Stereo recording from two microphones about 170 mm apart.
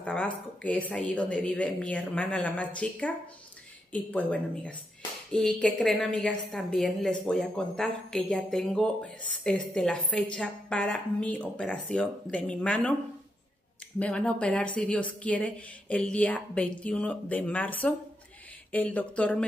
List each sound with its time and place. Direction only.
0.0 s a woman's voice: 10° left (ahead or behind)
13.9 s a woman's voice: 5° left (ahead or behind)